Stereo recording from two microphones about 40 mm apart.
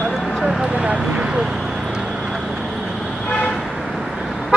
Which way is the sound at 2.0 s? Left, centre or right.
Centre.